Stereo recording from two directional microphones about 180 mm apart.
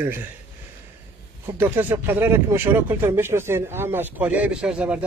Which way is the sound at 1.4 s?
10° right (ahead or behind).